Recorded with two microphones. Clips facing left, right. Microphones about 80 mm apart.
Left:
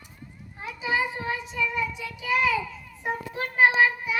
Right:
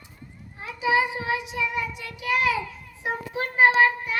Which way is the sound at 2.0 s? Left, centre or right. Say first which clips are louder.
Right 1 dB; right.